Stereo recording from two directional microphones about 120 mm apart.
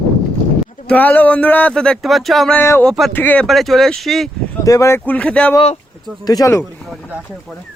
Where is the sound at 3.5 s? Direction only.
Centre (ahead or behind).